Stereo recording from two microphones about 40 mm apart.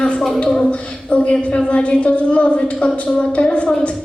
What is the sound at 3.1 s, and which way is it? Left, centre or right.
Speech, left.